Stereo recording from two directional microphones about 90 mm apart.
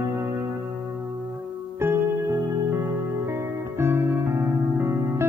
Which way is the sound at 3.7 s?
30° right (ahead or behind).